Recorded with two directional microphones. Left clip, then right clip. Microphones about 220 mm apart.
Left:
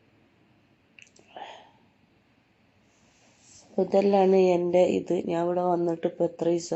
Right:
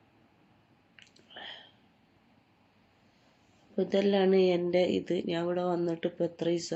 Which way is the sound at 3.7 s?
5° right (ahead or behind).